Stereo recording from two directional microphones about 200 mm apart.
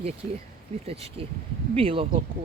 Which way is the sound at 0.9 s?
30° right (ahead or behind).